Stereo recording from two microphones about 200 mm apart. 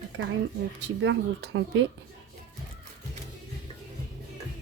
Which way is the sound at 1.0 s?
65° right (ahead or behind).